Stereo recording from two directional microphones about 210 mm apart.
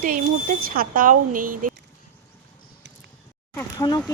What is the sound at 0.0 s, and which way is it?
Speech, 40° right (ahead or behind).